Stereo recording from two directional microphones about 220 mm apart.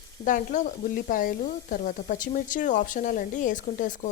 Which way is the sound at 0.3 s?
35° left (ahead or behind).